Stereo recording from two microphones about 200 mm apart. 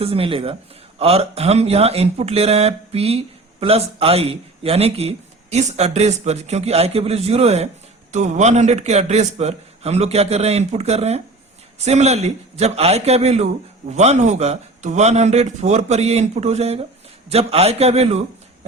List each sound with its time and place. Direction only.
0.0 s speech: 30° right (ahead or behind)